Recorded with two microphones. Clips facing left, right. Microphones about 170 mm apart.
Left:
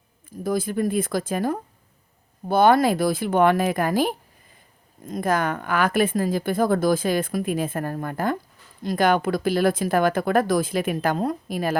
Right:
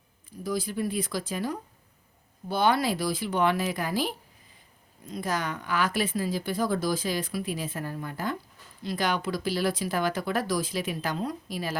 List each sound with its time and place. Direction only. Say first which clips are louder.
0.3 s speech: left 6 dB; 50° left (ahead or behind)